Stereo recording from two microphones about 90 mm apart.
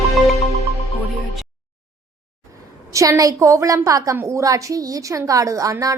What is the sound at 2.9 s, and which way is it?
A woman's voice, 40° right (ahead or behind).